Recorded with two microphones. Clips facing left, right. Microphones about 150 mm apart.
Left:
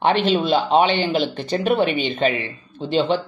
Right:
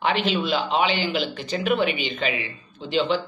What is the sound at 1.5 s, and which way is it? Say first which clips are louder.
Speech: left 4 dB; 35° left (ahead or behind).